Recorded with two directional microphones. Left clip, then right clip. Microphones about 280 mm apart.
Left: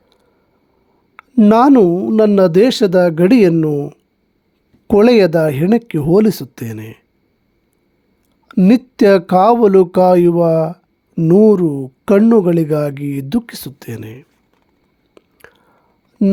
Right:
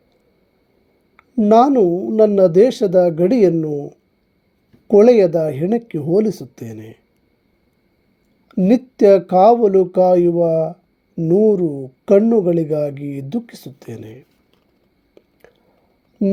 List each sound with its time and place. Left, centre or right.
1.1 s speech: left
4.9 s speech: left
8.4 s speech: left
11.6 s speech: left
12.0 s speech: left
15.1 s a sound: left